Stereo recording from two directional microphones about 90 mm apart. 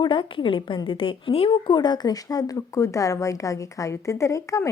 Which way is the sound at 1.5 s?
50° left (ahead or behind).